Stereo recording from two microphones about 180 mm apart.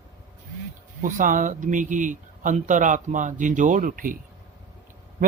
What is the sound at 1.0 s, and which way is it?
Speech, 45° right (ahead or behind).